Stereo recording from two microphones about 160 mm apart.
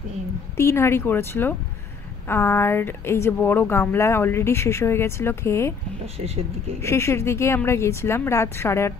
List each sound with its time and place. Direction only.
0.6 s a woman's voice: 15° left (ahead or behind)
6.1 s speech: 40° right (ahead or behind)
6.8 s a woman's voice: 15° left (ahead or behind)